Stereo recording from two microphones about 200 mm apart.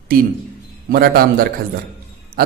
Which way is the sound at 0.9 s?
50° right (ahead or behind).